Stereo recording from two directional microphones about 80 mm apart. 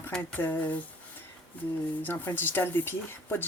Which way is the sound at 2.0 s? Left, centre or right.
Left.